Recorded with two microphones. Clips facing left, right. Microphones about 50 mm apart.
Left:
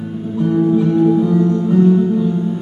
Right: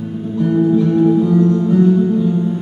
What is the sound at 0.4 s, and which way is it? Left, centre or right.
Music, centre.